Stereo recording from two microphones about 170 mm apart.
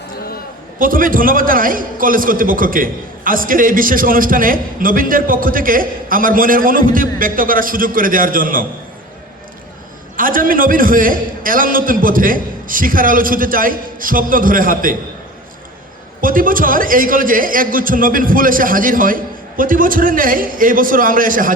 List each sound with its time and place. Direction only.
0.8 s a man's voice: 55° right (ahead or behind)
10.2 s a man's voice: 55° right (ahead or behind)
16.2 s a man's voice: 55° right (ahead or behind)